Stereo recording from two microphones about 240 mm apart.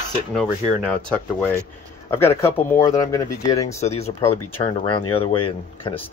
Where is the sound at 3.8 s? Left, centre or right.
Left.